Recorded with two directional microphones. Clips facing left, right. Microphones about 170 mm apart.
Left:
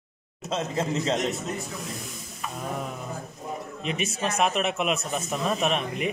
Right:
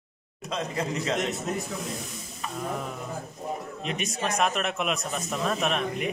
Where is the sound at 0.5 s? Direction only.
25° left (ahead or behind).